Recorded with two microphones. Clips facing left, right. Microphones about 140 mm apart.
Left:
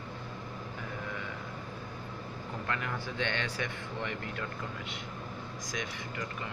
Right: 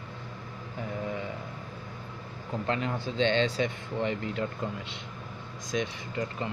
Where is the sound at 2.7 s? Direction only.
25° right (ahead or behind).